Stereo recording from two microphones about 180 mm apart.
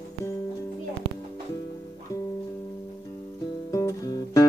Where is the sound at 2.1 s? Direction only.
15° left (ahead or behind).